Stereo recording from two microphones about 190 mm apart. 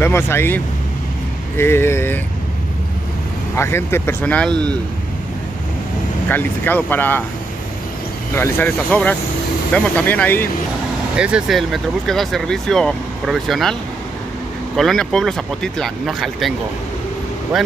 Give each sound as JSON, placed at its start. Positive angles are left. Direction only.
{"t": 0.0, "sound": "speech", "side_deg": 10}
{"t": 1.6, "sound": "speech", "side_deg": 10}
{"t": 3.5, "sound": "speech", "side_deg": 15}
{"t": 6.2, "sound": "speech", "side_deg": 10}
{"t": 8.4, "sound": "speech", "side_deg": 10}
{"t": 11.1, "sound": "speech", "side_deg": -5}
{"t": 14.8, "sound": "speech", "side_deg": 0}